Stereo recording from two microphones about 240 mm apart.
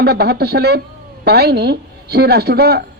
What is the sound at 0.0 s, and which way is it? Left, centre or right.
A woman's voice, right.